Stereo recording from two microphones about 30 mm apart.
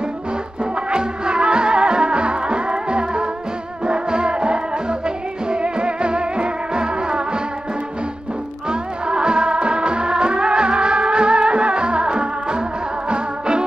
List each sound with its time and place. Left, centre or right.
0.8 s music: right
8.6 s music: right